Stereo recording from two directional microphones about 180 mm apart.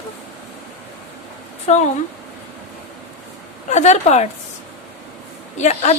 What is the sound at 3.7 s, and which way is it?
Speech, 40° left (ahead or behind).